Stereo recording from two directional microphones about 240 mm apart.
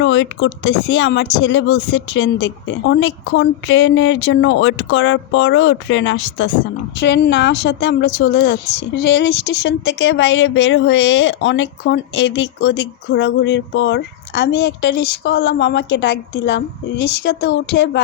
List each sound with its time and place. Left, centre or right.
0.0 s speech: left